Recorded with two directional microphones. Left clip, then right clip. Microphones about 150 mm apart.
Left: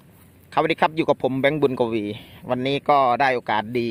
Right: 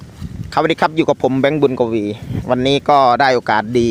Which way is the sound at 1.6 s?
Centre (ahead or behind).